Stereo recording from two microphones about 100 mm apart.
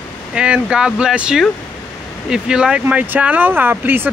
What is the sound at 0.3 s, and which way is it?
Speech, 10° right (ahead or behind).